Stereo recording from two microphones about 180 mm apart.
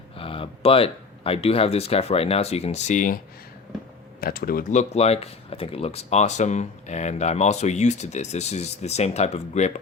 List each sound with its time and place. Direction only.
0.2 s speech: 30° left (ahead or behind)
4.2 s speech: 55° left (ahead or behind); by 9.7 s 35° left (ahead or behind)